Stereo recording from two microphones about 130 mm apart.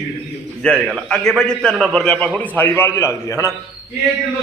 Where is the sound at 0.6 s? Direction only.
5° left (ahead or behind); by 3.5 s 20° left (ahead or behind).